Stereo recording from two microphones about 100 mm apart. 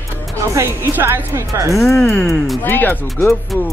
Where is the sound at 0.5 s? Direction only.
25° right (ahead or behind).